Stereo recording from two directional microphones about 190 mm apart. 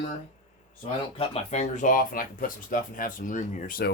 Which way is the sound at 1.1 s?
35° left (ahead or behind).